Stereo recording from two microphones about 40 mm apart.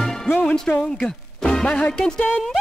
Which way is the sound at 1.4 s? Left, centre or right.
Centre.